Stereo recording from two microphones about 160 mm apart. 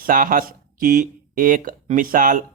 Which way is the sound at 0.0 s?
60° right (ahead or behind).